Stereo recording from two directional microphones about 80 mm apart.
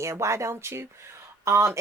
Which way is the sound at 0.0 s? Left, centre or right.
Right.